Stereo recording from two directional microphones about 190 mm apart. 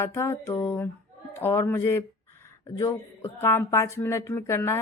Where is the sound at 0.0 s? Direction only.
15° left (ahead or behind).